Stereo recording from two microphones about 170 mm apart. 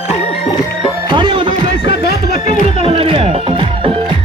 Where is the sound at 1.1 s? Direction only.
30° right (ahead or behind).